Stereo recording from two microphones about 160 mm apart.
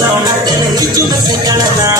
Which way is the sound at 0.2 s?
25° right (ahead or behind).